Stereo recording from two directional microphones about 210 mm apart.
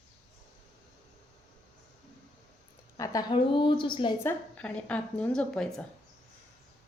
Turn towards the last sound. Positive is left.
turn(degrees=5)  # may be behind; listen again after turning